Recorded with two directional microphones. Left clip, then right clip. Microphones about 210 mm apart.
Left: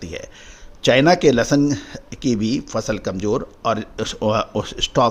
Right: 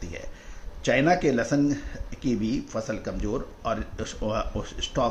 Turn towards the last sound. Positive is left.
turn(degrees=50)  # may be behind; listen again after turning